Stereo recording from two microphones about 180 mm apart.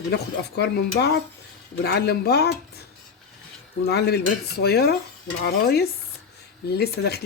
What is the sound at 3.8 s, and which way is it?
Speech, 60° left (ahead or behind).